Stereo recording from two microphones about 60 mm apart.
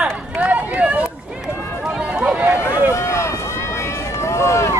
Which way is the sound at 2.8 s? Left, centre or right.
Left.